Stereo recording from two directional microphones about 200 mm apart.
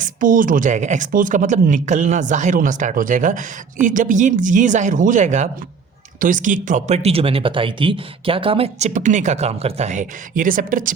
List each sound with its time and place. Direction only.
0.0 s speech: 40° right (ahead or behind)